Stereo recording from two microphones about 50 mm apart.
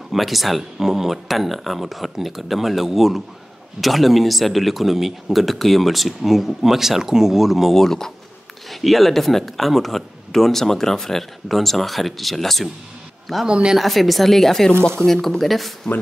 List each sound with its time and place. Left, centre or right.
0.1 s speech: centre
7.8 s speech: centre
13.5 s speech: centre
13.7 s speech: centre